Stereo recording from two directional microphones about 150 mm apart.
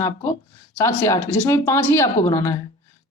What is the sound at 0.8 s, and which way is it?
Speech, 20° left (ahead or behind).